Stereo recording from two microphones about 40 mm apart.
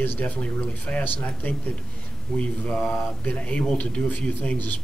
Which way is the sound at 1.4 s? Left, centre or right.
Left.